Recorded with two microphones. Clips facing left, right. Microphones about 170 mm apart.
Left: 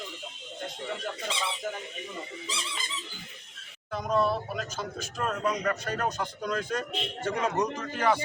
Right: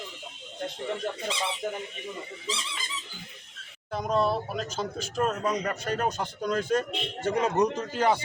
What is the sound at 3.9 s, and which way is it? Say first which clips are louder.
A man's voice: right 1 dB; 30° right (ahead or behind).